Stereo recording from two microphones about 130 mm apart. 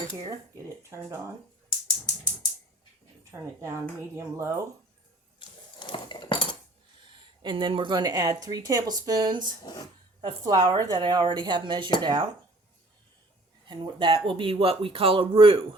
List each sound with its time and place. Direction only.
0.8 s speech: 20° right (ahead or behind)
3.6 s speech: 20° right (ahead or behind)
5.4 s a sound: 40° left (ahead or behind)
7.4 s speech: 40° right (ahead or behind)
13.7 s speech: 40° right (ahead or behind)